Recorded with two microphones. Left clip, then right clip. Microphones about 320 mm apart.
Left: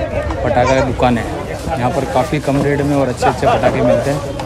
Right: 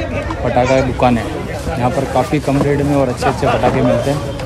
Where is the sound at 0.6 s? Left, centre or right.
Centre.